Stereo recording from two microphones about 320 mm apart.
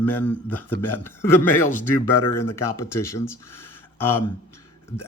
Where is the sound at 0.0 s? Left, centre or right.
Centre.